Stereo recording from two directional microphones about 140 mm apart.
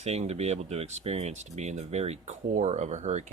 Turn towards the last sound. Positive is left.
turn(degrees=-55)  # may be behind; listen again after turning